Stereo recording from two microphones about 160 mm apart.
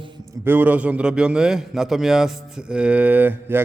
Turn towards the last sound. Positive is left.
turn(degrees=-10)  # may be behind; listen again after turning